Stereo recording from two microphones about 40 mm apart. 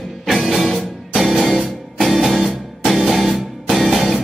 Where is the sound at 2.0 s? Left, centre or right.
Centre.